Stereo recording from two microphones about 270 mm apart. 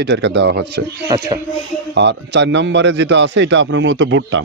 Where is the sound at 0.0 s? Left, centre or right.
Right.